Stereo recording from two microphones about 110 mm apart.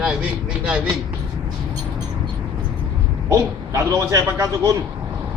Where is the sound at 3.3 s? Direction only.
30° right (ahead or behind).